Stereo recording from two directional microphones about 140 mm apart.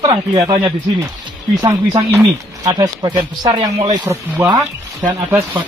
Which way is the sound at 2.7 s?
35° right (ahead or behind).